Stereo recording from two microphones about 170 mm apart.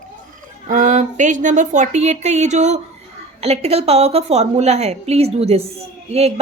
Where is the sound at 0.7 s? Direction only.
45° right (ahead or behind).